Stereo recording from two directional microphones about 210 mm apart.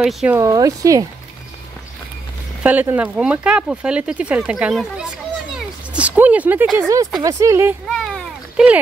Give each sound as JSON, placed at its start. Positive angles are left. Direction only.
{"t": 0.0, "sound": "speech", "side_deg": -5}
{"t": 0.4, "sound": "speech", "side_deg": -15}
{"t": 2.6, "sound": "speech", "side_deg": -10}
{"t": 7.2, "sound": "speech", "side_deg": -15}
{"t": 7.9, "sound": "a sound", "side_deg": 0}